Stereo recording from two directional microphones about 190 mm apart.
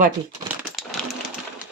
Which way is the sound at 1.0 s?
5° left (ahead or behind).